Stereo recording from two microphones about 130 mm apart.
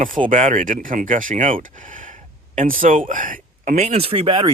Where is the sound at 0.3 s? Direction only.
80° right.